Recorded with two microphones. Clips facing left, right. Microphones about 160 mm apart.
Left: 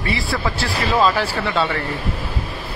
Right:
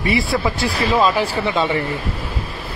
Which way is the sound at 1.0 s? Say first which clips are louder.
Even; 10° right (ahead or behind).